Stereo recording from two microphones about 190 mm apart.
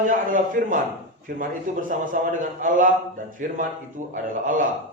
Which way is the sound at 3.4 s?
45° right (ahead or behind).